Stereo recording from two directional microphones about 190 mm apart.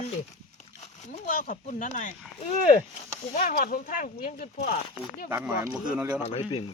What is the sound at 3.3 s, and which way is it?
Speech, 50° left (ahead or behind).